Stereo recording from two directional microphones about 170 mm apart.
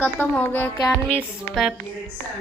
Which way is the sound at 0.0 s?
10° left (ahead or behind).